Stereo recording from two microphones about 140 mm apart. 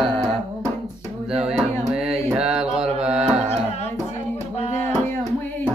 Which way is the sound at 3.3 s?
45° right (ahead or behind).